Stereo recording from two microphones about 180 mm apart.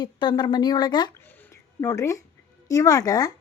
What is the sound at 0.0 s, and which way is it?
Speech, 25° left (ahead or behind).